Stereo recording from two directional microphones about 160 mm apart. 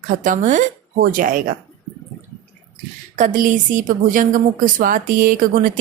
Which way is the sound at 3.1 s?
50° right (ahead or behind).